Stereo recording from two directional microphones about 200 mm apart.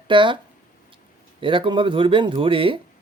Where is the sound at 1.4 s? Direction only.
25° right (ahead or behind).